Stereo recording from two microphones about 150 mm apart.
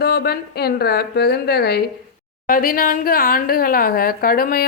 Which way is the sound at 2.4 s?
70° left (ahead or behind).